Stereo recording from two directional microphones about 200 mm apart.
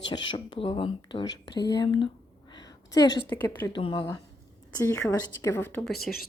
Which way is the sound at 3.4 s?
10° left (ahead or behind).